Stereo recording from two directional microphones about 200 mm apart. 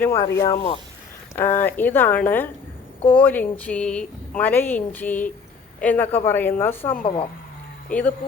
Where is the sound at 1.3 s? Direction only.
10° left (ahead or behind).